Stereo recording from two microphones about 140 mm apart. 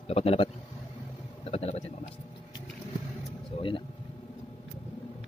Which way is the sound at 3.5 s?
40° left (ahead or behind).